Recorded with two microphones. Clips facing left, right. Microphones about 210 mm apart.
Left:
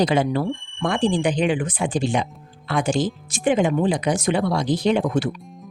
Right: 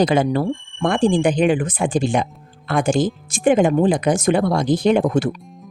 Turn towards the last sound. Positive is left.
turn(degrees=-50)  # may be behind; listen again after turning